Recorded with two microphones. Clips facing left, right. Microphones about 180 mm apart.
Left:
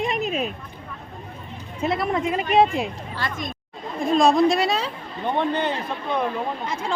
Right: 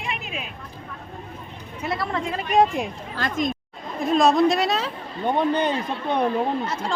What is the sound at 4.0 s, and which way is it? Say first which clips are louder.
Speech: even; centre (ahead or behind).